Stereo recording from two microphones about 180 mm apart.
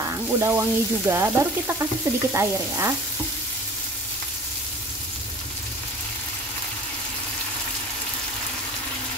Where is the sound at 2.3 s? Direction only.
15° right (ahead or behind).